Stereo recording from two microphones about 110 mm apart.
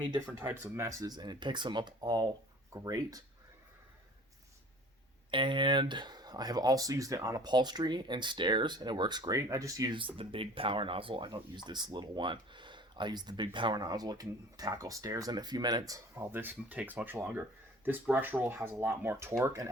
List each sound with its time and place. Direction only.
0.6 s speech: 30° right (ahead or behind)
5.3 s speech: 50° right (ahead or behind); by 9.9 s 30° right (ahead or behind)
9.9 s speech: 50° right (ahead or behind); by 16.2 s 30° right (ahead or behind)
16.3 s speech: 15° right (ahead or behind)